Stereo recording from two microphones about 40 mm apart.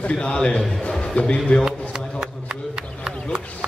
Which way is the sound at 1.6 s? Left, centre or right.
Right.